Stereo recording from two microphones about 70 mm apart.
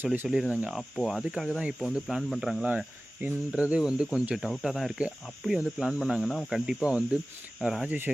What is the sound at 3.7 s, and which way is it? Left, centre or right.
Speech, centre.